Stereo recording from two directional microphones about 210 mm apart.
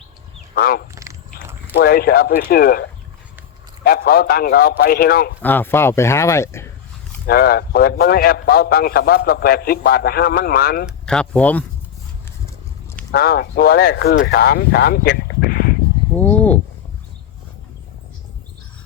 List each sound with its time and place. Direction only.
0.5 s a man's voice: 45° left (ahead or behind)
0.9 s biting: 15° right (ahead or behind)
1.7 s a man's voice: 45° left (ahead or behind)
3.8 s a man's voice: 45° left (ahead or behind)
5.4 s speech: 10° left (ahead or behind)
7.3 s a man's voice: 45° left (ahead or behind)
10.8 s speech: 5° left (ahead or behind)
13.1 s speech: 45° left (ahead or behind)
16.1 s a sound: 5° left (ahead or behind)